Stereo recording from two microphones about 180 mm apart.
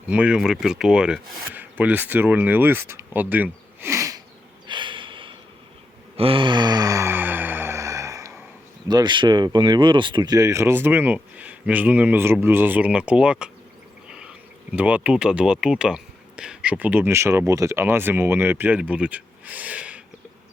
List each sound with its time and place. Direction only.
0.1 s speech: 5° right (ahead or behind)
4.6 s snort: 25° right (ahead or behind)
6.1 s sigh: 30° right (ahead or behind)
8.9 s speech: 25° right (ahead or behind); by 13.5 s 5° right (ahead or behind)
14.7 s speech: 10° right (ahead or behind)